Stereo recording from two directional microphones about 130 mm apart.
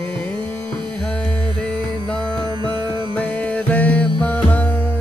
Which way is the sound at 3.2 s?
10° left (ahead or behind).